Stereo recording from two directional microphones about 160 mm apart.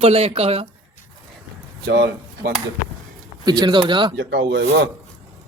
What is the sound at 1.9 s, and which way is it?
Speech, 90° right.